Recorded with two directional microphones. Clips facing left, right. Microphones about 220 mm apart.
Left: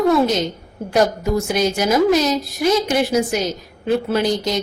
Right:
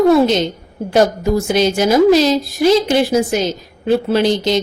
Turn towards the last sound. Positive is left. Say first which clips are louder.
# right 4 dB
turn(degrees=-25)  # may be behind; listen again after turning